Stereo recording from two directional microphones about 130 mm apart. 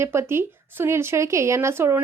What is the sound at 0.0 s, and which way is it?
Speech, 20° right (ahead or behind).